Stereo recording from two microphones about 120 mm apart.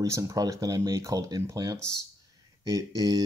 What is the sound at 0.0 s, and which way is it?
Speech, 25° right (ahead or behind).